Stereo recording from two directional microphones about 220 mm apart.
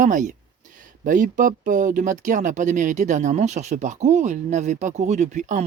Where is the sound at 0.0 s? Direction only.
35° right (ahead or behind).